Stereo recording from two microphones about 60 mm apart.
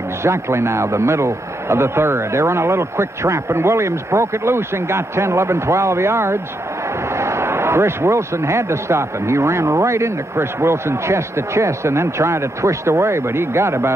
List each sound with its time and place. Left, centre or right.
0.2 s speech: right